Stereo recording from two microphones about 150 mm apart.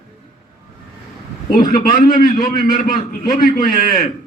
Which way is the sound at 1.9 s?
65° left (ahead or behind).